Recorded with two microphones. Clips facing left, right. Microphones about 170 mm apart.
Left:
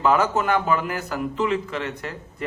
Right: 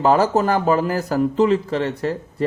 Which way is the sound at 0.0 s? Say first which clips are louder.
Right 4 dB; 35° right (ahead or behind).